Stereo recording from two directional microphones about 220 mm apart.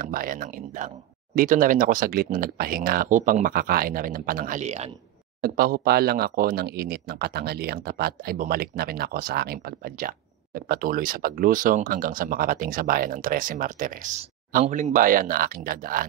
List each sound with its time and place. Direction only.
0.0 s speech: 40° right (ahead or behind)
5.4 s speech: 45° right (ahead or behind)